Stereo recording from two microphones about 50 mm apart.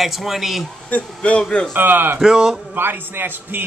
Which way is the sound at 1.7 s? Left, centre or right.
Right.